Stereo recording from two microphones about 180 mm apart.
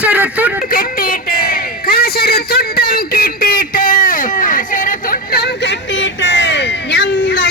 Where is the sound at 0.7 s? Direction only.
50° left (ahead or behind).